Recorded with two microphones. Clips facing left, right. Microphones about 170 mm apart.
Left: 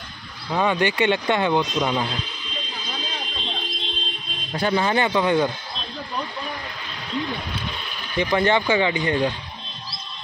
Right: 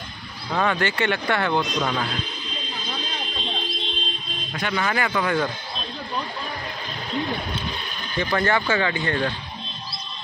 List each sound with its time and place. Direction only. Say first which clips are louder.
0.6 s speech: left 2 dB; 15° left (ahead or behind)
4.6 s speech: left 4 dB; 30° left (ahead or behind)
8.2 s speech: left 3 dB; 15° left (ahead or behind)